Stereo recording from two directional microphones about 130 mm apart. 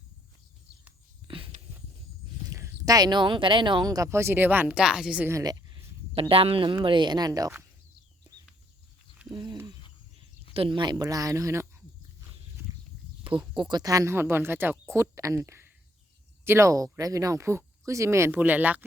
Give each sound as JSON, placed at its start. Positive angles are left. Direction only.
{"t": 1.3, "sound": "a sound", "side_deg": -45}
{"t": 2.5, "sound": "speech", "side_deg": -25}
{"t": 5.3, "sound": "a sound", "side_deg": -30}
{"t": 6.1, "sound": "speech", "side_deg": -45}
{"t": 9.3, "sound": "speech", "side_deg": -30}
{"t": 10.5, "sound": "speech", "side_deg": -40}
{"t": 13.3, "sound": "speech", "side_deg": -10}
{"t": 13.6, "sound": "a woman's voice", "side_deg": -35}